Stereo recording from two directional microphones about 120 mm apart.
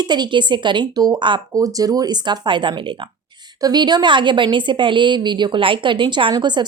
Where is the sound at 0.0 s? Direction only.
35° right (ahead or behind).